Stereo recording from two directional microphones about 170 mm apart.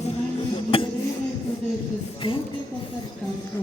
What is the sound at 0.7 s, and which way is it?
Music, 30° left (ahead or behind).